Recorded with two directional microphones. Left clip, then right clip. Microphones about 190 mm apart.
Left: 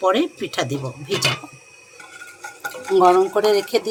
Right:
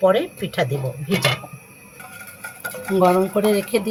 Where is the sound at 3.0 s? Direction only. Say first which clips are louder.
Left 2 dB; 40° left (ahead or behind).